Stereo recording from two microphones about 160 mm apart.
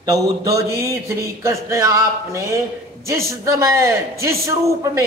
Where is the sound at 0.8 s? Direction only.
20° right (ahead or behind).